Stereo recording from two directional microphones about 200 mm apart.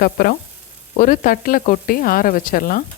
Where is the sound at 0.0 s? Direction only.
45° left (ahead or behind).